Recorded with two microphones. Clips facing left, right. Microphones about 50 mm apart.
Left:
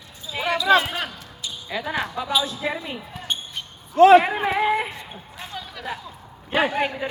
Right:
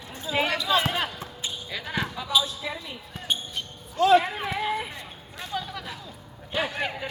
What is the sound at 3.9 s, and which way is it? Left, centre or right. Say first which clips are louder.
Speech: left 7 dB; left.